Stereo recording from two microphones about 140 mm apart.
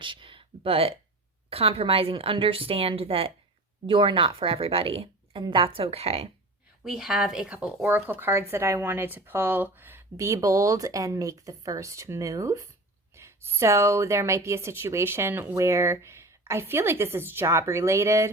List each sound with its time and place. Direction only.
0.0 s a woman's voice: 35° right (ahead or behind)
6.8 s speech: 5° right (ahead or behind); by 18.3 s 20° right (ahead or behind)